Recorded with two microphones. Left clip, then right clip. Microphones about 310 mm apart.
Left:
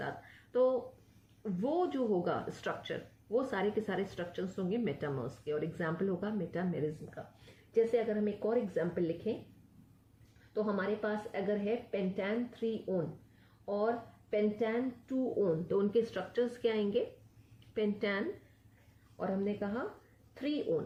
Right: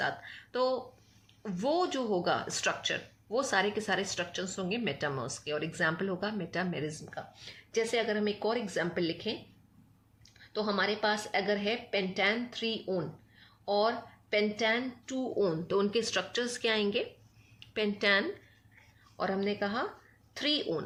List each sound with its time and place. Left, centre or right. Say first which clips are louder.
0.0 s a sound: right 8 dB; right
1.4 s a woman's voice: right 3 dB; right
10.5 s a woman's voice: right 4 dB; right